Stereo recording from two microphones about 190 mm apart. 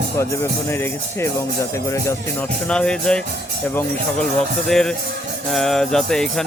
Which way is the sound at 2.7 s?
5° left (ahead or behind).